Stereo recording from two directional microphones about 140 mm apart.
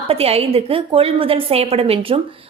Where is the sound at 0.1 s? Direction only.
45° right (ahead or behind).